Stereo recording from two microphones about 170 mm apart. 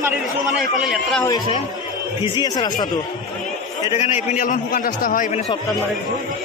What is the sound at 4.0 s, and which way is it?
A man's voice, 40° left (ahead or behind).